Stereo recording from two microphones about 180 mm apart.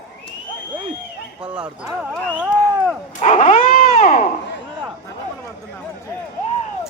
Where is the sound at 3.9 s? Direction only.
40° left (ahead or behind).